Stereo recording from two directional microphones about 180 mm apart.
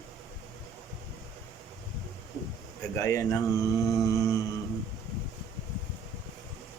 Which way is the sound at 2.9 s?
15° left (ahead or behind).